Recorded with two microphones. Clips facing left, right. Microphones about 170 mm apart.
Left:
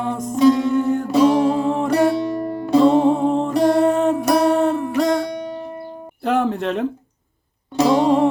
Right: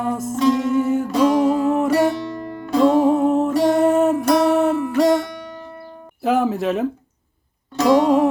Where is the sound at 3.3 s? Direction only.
5° right (ahead or behind).